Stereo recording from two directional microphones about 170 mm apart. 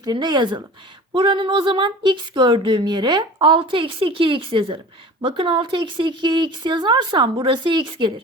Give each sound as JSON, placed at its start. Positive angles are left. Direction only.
{"t": 0.0, "sound": "speech", "side_deg": -25}